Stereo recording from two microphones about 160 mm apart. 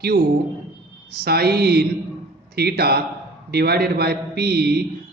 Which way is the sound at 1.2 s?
75° right (ahead or behind).